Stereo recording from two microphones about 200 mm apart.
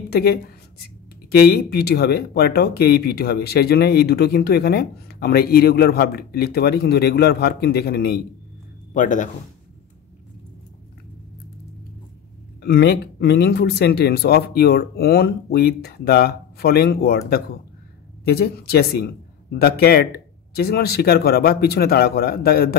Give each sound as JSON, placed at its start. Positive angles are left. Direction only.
{"t": 0.1, "sound": "a woman's voice", "side_deg": 50}
{"t": 8.9, "sound": "speech", "side_deg": 40}
{"t": 12.6, "sound": "speech", "side_deg": 55}